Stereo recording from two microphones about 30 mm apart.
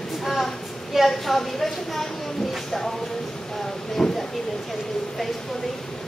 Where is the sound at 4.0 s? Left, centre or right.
Centre.